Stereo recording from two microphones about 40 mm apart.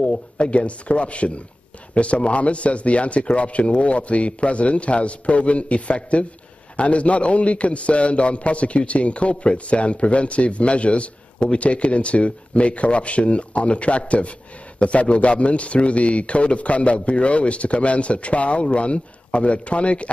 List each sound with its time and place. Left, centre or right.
0.0 s a man's voice: left